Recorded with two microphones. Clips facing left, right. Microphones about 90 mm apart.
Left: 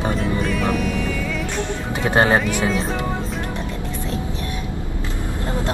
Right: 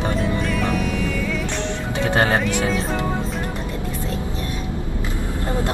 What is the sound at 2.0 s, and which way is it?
Speech, 25° left (ahead or behind).